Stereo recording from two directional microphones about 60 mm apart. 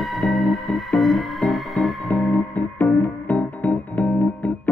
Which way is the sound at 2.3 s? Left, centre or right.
Left.